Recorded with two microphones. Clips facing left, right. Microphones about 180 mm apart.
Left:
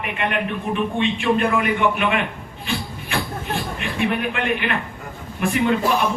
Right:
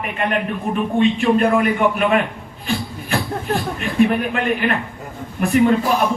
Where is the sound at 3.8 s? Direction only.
40° right (ahead or behind).